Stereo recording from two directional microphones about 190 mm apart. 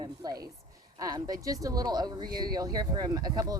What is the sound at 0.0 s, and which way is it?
Speech, 20° right (ahead or behind).